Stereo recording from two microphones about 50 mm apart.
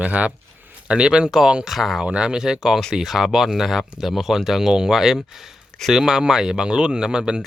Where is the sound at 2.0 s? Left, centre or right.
Centre.